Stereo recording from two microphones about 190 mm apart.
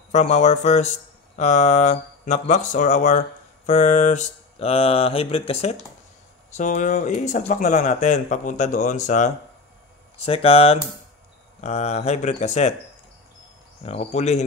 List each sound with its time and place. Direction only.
0.1 s speech: 35° left (ahead or behind)
13.8 s speech: 35° left (ahead or behind)